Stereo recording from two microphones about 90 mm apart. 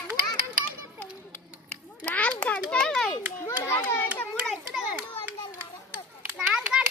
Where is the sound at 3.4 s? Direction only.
35° left (ahead or behind).